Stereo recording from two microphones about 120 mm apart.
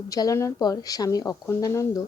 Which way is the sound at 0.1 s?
30° left (ahead or behind).